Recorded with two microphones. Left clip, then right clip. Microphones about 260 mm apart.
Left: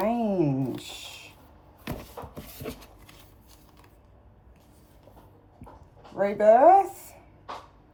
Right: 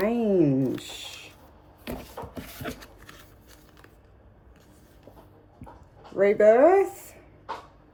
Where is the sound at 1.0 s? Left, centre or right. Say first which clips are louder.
Right 2 dB; right.